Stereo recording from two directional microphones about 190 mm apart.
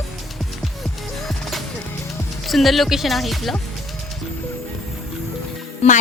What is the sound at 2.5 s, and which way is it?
Speech, centre (ahead or behind).